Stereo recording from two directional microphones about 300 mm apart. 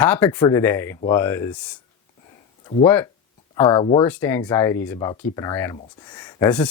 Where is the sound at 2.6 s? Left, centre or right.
Centre.